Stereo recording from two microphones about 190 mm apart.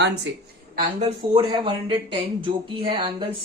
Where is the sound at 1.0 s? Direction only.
30° right (ahead or behind).